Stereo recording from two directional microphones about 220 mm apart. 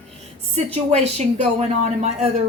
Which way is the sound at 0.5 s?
30° right (ahead or behind).